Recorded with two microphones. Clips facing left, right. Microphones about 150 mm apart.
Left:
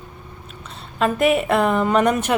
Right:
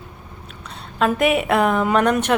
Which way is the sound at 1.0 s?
Centre (ahead or behind).